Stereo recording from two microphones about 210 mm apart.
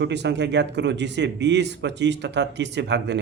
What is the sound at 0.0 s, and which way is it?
Speech, 55° right (ahead or behind).